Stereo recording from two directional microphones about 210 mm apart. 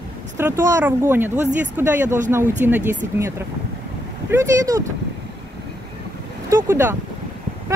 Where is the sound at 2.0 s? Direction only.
35° right (ahead or behind).